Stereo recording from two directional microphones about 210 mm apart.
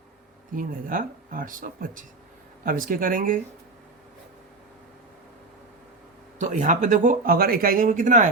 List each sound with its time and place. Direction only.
0.5 s speech: 40° right (ahead or behind)
6.4 s speech: 35° right (ahead or behind)